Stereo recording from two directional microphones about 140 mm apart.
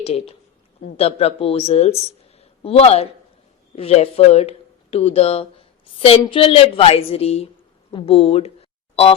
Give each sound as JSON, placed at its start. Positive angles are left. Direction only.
{"t": 0.0, "sound": "a woman's voice", "side_deg": 45}